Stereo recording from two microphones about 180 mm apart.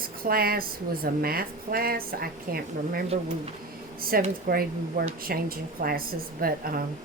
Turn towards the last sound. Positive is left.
turn(degrees=-55)  # may be behind; listen again after turning